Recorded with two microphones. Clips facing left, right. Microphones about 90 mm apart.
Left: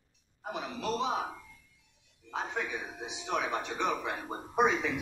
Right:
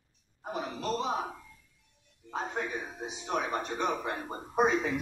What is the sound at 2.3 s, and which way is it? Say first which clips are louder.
A man's voice: right 1 dB; 40° right (ahead or behind).